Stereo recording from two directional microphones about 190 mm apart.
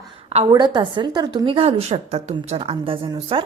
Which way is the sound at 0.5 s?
25° right (ahead or behind).